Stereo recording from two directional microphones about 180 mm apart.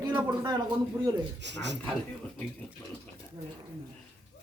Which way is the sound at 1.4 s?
75° right (ahead or behind).